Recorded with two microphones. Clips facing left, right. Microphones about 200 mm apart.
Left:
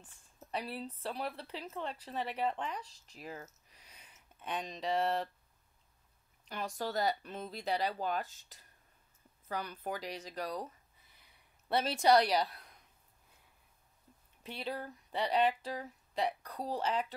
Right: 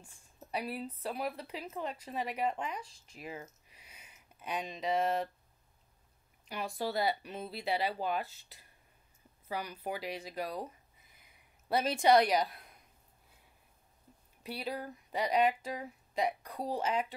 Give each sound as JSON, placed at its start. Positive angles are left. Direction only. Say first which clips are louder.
{"t": 0.0, "sound": "a sound", "louder": "right 2 dB", "side_deg": -10}
{"t": 1.0, "sound": "speech", "louder": "right 3 dB", "side_deg": -10}
{"t": 2.8, "sound": "speech", "louder": "right 2 dB", "side_deg": 40}
{"t": 3.2, "sound": "speech", "louder": "right 2 dB", "side_deg": -10}
{"t": 3.7, "sound": "a sound", "louder": "right 1 dB", "side_deg": -5}
{"t": 6.5, "sound": "speech", "louder": "right 2 dB", "side_deg": -10}
{"t": 8.3, "sound": "speech", "louder": "right 2 dB", "side_deg": 45}
{"t": 9.5, "sound": "speech", "louder": "right 1 dB", "side_deg": -10}
{"t": 11.7, "sound": "speech", "louder": "right 2 dB", "side_deg": -15}
{"t": 14.4, "sound": "speech", "louder": "right 2 dB", "side_deg": -10}